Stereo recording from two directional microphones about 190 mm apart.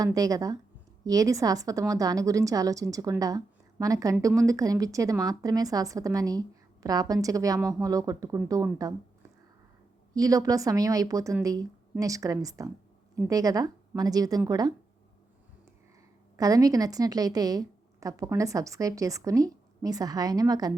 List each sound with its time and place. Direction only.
0.0 s a woman's voice: 20° right (ahead or behind)
10.2 s a woman's voice: 20° right (ahead or behind)
16.4 s a woman's voice: 20° right (ahead or behind)